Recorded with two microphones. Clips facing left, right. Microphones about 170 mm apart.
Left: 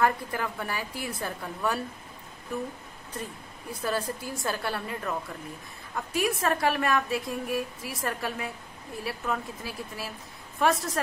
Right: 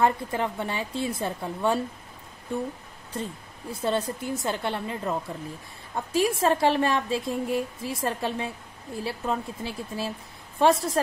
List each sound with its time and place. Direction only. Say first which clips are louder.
0.0 s a woman's voice: right 3 dB; 25° right (ahead or behind)
3.7 s a woman's voice: right 3 dB; 25° right (ahead or behind)